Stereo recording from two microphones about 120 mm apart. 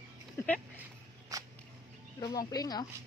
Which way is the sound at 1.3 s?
30° right (ahead or behind).